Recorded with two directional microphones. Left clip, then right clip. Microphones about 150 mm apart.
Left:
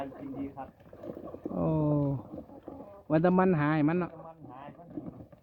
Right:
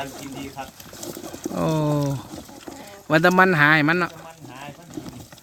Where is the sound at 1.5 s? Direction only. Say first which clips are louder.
Right 7 dB; 15° right (ahead or behind).